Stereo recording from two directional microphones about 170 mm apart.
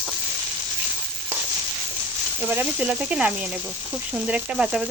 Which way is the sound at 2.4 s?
10° right (ahead or behind).